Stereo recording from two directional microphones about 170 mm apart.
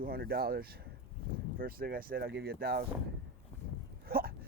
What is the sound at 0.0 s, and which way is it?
Speech, 65° right (ahead or behind).